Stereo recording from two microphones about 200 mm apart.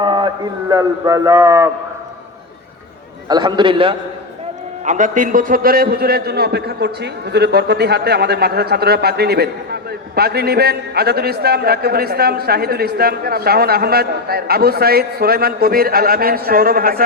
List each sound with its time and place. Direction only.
0.0 s a man's voice: 20° right (ahead or behind)
3.2 s a man's voice: 20° right (ahead or behind)
4.9 s a man's voice: 40° right (ahead or behind)